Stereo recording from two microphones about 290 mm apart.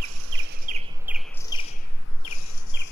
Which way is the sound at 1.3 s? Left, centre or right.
Centre.